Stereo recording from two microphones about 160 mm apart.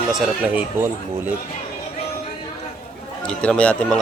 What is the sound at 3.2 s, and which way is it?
Speech, 5° left (ahead or behind).